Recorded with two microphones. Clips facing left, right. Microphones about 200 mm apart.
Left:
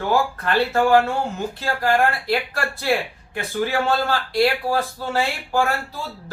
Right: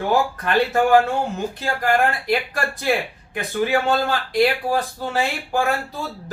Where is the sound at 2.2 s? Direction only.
15° right (ahead or behind).